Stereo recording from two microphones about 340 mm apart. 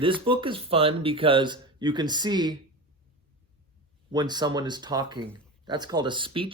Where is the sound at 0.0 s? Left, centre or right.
Centre.